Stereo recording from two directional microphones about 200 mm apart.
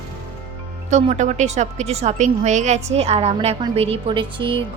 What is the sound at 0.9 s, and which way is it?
A woman's voice, 35° right (ahead or behind).